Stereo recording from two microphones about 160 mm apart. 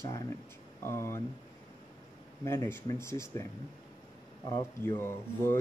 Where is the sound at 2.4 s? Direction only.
15° left (ahead or behind).